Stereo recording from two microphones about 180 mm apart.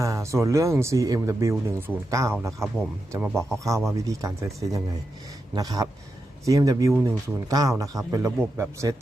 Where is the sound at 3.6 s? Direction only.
15° right (ahead or behind).